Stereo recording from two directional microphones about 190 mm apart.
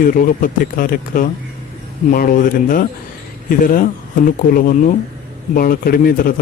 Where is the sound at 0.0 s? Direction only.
45° left (ahead or behind).